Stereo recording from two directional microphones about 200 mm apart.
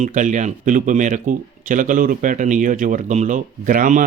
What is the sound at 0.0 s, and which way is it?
Speech, 40° right (ahead or behind).